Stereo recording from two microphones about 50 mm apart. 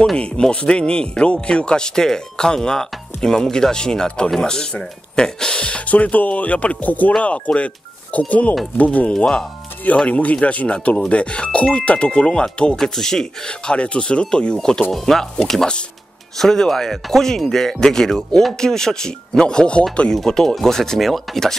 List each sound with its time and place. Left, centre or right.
0.2 s speech: left
9.1 s speech: centre
10.0 s speech: left
12.7 s speech: centre
14.9 s speech: centre